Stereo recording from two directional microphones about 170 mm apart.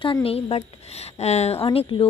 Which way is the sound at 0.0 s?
30° left (ahead or behind).